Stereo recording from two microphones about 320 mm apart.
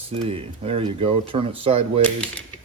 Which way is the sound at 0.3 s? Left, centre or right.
Centre.